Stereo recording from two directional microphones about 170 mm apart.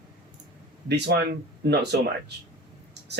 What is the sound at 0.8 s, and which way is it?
Speech, 80° right.